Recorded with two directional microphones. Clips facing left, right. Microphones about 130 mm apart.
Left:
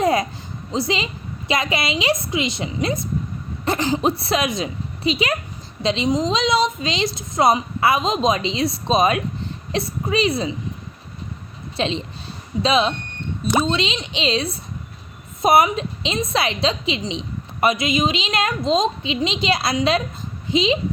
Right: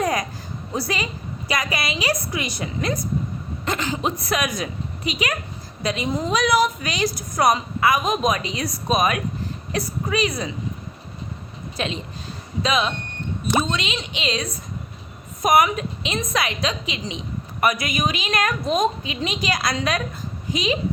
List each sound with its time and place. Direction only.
0.0 s a sound: 25° left (ahead or behind)
0.7 s a woman's voice: 20° left (ahead or behind)
11.8 s a woman's voice: 30° left (ahead or behind)